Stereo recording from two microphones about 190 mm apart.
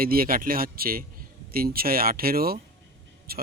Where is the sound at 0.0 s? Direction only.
50° right (ahead or behind).